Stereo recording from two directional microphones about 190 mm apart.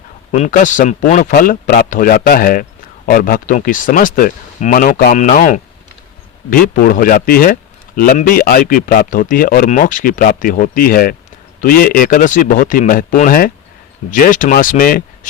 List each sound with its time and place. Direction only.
0.3 s a man's voice: 40° left (ahead or behind)
5.1 s a man's voice: 40° left (ahead or behind)